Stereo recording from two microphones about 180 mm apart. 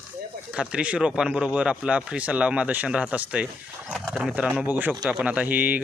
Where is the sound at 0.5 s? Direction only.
5° right (ahead or behind).